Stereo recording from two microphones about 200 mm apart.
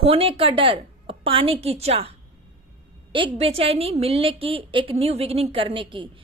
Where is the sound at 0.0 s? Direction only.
30° right (ahead or behind).